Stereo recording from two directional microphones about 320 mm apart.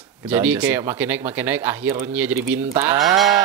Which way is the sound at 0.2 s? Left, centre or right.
Centre.